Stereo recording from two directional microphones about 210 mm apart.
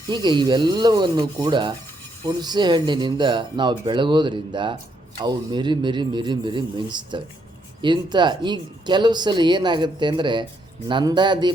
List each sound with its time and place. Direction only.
0.1 s speech: 20° right (ahead or behind)